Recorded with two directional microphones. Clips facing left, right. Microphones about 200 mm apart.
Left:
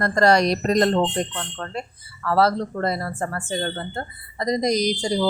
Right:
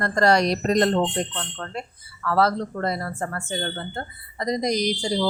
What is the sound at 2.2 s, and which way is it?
Speech, 35° left (ahead or behind).